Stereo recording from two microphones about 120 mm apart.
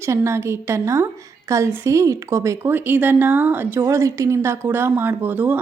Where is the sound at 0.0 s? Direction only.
20° right (ahead or behind).